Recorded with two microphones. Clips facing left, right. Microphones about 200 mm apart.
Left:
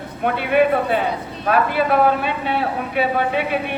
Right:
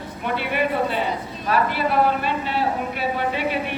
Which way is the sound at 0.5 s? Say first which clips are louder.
Left 7 dB; 55° left (ahead or behind).